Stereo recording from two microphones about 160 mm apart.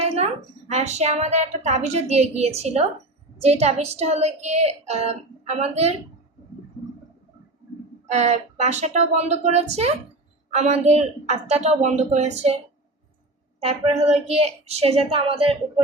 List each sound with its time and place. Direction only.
0.7 s speech: 45° right (ahead or behind)
8.1 s speech: 45° right (ahead or behind)
13.6 s speech: 40° right (ahead or behind)